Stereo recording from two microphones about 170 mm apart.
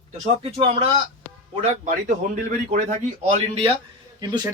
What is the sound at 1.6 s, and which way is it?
A man's voice, 45° right (ahead or behind).